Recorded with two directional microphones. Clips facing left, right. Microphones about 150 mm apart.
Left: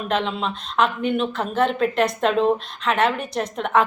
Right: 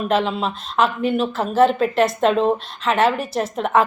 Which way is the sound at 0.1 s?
5° right (ahead or behind).